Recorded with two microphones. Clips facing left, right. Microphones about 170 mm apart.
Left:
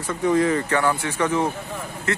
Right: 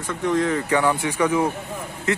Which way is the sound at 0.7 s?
15° right (ahead or behind).